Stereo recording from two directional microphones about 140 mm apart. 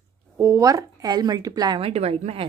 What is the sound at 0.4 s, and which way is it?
A woman's voice, 20° right (ahead or behind).